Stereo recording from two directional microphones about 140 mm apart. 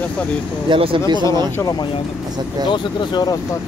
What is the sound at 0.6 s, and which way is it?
Speech, 40° right (ahead or behind).